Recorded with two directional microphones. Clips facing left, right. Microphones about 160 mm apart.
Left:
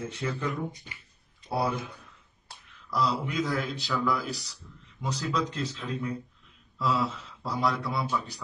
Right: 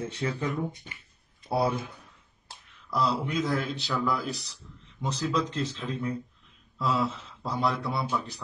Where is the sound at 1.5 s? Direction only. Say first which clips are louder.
Right 2 dB; 30° right (ahead or behind).